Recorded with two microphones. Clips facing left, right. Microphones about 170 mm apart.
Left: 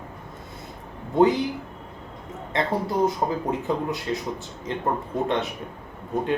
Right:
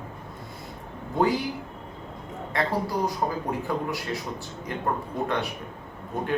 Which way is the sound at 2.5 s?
20° left (ahead or behind).